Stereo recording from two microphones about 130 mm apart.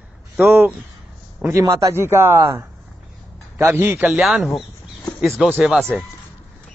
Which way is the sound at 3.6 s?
25° right (ahead or behind).